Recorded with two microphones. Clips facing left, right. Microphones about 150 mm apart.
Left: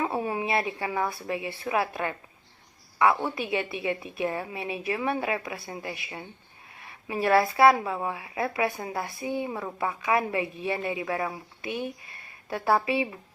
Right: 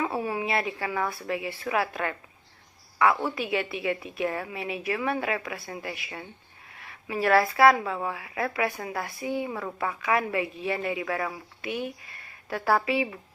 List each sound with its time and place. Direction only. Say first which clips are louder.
0.0 s a woman's voice: even; 25° left (ahead or behind)